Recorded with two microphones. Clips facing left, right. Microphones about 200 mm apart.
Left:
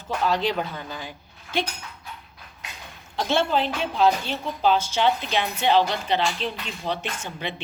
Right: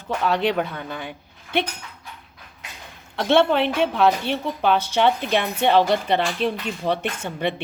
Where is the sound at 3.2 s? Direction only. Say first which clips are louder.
Right 5 dB; 65° right (ahead or behind).